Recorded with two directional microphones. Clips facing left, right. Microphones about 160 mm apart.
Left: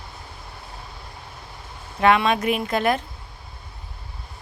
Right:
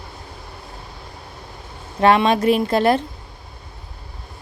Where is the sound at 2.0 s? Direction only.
35° right (ahead or behind).